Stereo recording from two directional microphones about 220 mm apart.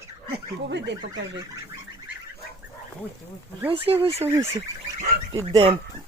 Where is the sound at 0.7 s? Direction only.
50° right (ahead or behind).